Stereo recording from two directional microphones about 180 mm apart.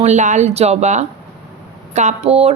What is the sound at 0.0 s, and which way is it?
Speech, 40° right (ahead or behind).